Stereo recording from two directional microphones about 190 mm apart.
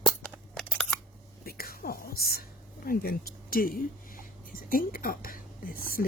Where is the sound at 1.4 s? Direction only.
55° left (ahead or behind).